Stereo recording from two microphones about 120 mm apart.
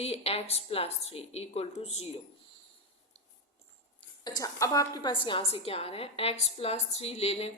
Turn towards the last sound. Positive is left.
turn(degrees=60)  # may be behind; listen again after turning